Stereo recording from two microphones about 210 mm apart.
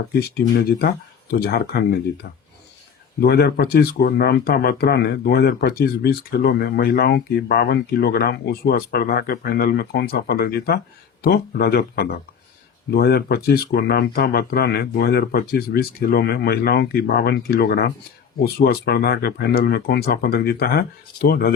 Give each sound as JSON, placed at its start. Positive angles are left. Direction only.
{"t": 0.1, "sound": "speech", "side_deg": 45}